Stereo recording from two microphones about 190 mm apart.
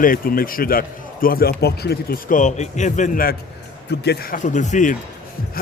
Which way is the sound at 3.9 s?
60° left (ahead or behind).